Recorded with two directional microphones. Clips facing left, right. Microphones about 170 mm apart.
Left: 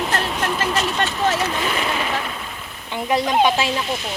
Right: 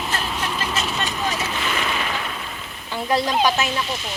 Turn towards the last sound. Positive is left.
turn(degrees=20)  # may be behind; listen again after turning